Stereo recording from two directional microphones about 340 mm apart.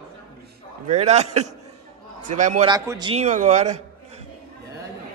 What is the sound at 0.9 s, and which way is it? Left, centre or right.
A man's voice, centre.